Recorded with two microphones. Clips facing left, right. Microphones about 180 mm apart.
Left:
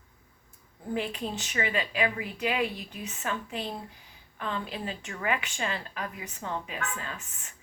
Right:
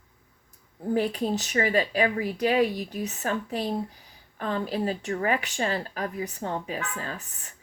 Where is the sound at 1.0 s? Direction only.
40° right (ahead or behind).